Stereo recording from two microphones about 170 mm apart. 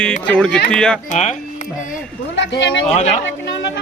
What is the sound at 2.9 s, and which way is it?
Speech, 40° left (ahead or behind).